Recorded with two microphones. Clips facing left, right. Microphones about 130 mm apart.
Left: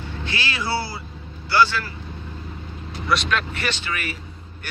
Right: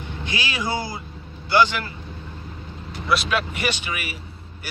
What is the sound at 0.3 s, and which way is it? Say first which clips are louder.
Speech: even; 15° right (ahead or behind).